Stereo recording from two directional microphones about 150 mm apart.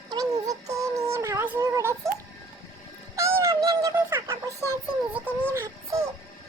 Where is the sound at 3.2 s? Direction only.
20° right (ahead or behind).